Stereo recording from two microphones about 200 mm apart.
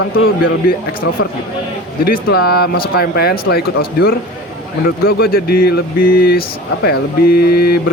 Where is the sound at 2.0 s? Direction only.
50° left (ahead or behind).